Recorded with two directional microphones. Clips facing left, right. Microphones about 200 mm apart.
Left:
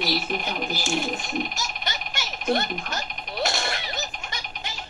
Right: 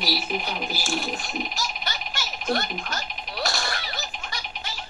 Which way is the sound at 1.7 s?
Centre (ahead or behind).